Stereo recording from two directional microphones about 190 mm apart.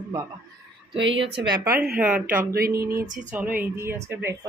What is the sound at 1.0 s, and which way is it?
Speech, 75° right (ahead or behind).